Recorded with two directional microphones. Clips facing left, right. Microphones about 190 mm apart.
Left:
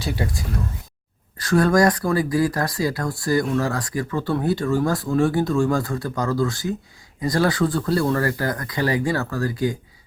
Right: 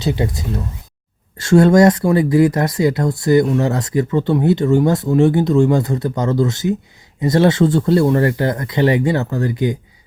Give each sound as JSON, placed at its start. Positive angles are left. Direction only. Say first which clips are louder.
{"t": 0.0, "sound": "speech", "louder": "right 7 dB", "side_deg": -20}